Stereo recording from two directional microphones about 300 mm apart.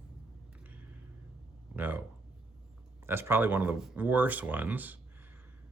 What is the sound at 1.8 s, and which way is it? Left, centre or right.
Speech, centre.